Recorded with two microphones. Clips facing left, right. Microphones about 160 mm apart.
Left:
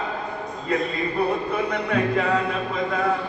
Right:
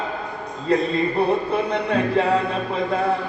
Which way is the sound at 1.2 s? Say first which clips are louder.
Even; 30° right (ahead or behind).